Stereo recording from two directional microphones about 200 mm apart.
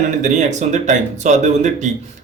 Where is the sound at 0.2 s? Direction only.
35° right (ahead or behind).